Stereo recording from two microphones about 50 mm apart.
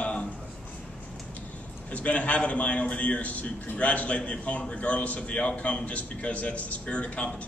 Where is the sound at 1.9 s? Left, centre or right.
Left.